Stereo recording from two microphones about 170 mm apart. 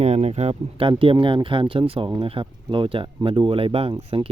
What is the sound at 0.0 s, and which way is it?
Speech, 40° right (ahead or behind).